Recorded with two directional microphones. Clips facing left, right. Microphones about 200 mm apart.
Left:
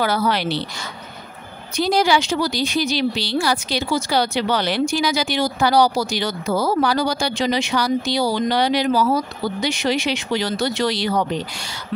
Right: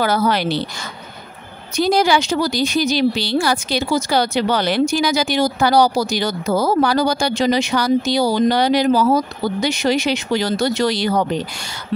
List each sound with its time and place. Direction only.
0.0 s speech: 45° right (ahead or behind)
1.8 s speech: 50° right (ahead or behind)